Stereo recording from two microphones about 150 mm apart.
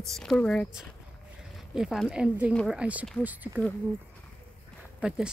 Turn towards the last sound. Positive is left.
turn(degrees=-10)  # may be behind; listen again after turning